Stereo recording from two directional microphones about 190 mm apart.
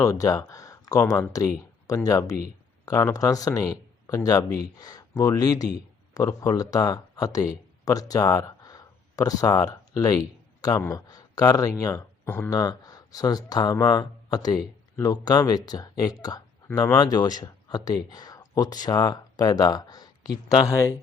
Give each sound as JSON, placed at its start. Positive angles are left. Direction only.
{"t": 0.0, "sound": "speech", "side_deg": 15}